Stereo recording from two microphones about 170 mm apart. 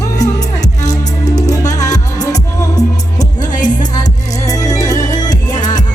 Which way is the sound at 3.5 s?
50° left (ahead or behind).